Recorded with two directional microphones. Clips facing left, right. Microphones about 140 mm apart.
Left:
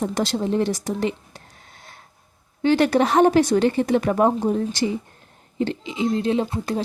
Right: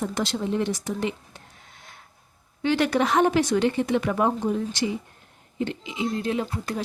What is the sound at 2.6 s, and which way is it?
A woman's voice, 35° left (ahead or behind).